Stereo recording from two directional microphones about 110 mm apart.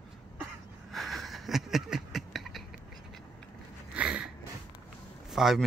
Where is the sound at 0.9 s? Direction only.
Centre (ahead or behind).